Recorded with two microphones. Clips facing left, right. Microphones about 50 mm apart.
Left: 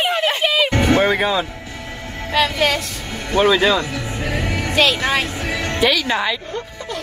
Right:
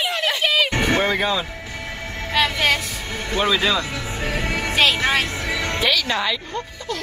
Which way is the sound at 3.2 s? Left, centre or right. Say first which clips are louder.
Left 6 dB; left.